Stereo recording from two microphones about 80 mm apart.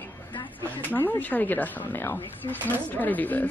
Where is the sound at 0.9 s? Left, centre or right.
Left.